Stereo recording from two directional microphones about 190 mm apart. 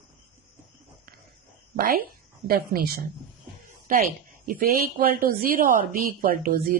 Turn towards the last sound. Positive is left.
turn(degrees=-50)  # may be behind; listen again after turning